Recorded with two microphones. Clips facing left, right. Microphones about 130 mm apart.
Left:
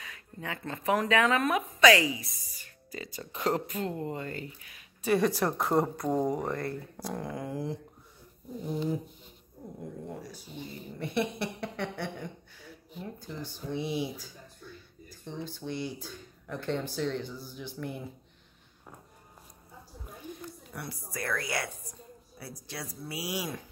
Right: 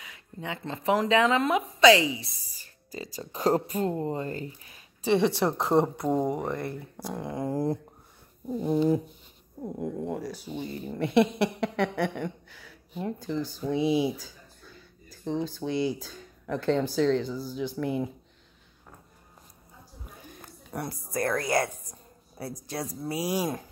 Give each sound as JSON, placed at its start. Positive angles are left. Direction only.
{"t": 0.0, "sound": "speech", "side_deg": -20}
{"t": 7.3, "sound": "speech", "side_deg": -35}
{"t": 8.6, "sound": "speech", "side_deg": -70}
{"t": 9.8, "sound": "speech", "side_deg": -90}
{"t": 15.3, "sound": "speech", "side_deg": -90}
{"t": 20.4, "sound": "a woman's voice", "side_deg": -45}